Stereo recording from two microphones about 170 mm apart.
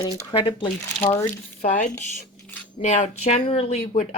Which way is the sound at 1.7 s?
45° left (ahead or behind).